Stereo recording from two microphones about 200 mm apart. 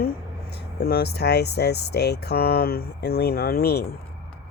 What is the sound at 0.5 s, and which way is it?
Speech, 50° left (ahead or behind).